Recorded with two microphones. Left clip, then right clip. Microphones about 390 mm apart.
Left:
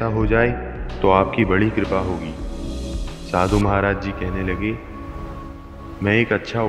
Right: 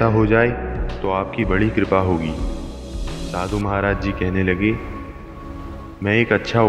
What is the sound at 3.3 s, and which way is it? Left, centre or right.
Speech, left.